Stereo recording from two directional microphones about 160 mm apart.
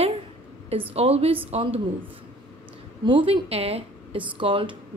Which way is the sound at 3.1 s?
30° right (ahead or behind).